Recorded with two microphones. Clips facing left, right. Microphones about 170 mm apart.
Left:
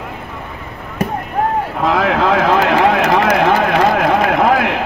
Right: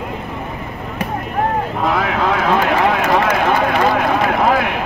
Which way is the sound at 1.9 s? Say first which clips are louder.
Left 4 dB; 80° left.